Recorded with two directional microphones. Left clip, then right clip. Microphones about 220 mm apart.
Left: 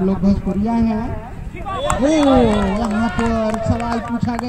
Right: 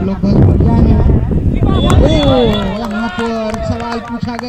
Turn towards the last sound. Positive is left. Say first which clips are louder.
# right 2 dB
turn(degrees=-25)  # may be behind; listen again after turning